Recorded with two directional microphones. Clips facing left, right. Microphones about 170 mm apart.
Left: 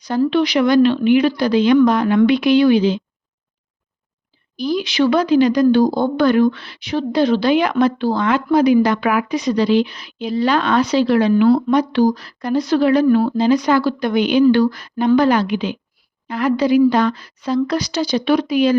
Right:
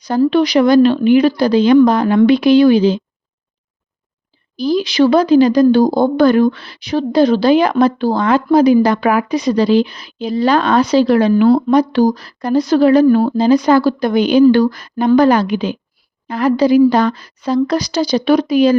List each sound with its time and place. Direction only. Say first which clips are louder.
0.1 s speech: right 4 dB; 40° right (ahead or behind)
4.5 s speech: right 4 dB; 35° right (ahead or behind)